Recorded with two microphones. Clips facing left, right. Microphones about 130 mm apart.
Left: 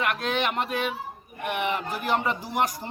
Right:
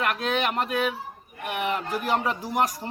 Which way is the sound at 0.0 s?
Centre (ahead or behind).